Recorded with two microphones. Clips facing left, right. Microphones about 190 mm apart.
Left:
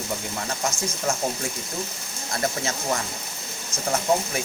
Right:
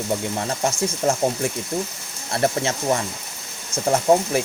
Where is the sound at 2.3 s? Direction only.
30° right (ahead or behind).